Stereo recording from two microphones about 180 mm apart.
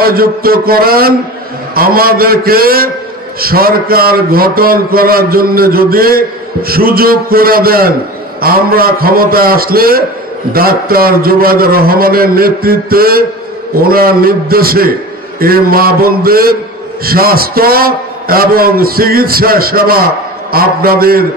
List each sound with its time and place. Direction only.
0.0 s a man's voice: 55° right (ahead or behind)